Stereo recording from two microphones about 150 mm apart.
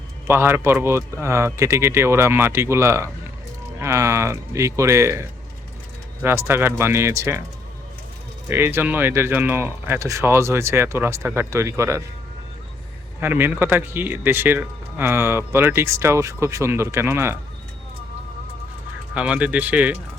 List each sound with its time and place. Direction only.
0.3 s speech: 15° right (ahead or behind)
6.2 s speech: 15° right (ahead or behind)
8.4 s speech: 15° right (ahead or behind)
13.1 s speech: 15° right (ahead or behind)
19.1 s speech: 5° right (ahead or behind)